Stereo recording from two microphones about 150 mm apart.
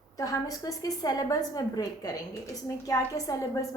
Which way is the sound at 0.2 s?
25° left (ahead or behind).